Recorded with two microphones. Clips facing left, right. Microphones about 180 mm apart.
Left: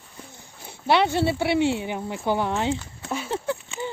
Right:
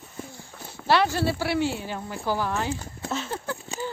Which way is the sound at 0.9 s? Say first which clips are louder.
Left 2 dB; 20° left (ahead or behind).